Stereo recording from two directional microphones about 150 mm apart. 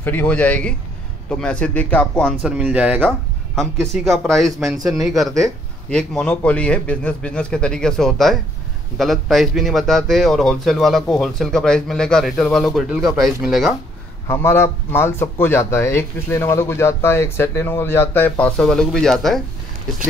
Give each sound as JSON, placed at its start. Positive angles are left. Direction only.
{"t": 0.0, "sound": "speech", "side_deg": 10}
{"t": 2.4, "sound": "speech", "side_deg": -10}
{"t": 3.0, "sound": "a man's voice", "side_deg": 5}
{"t": 14.2, "sound": "speech", "side_deg": 15}